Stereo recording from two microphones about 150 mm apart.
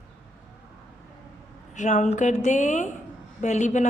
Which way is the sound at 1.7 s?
55° left (ahead or behind).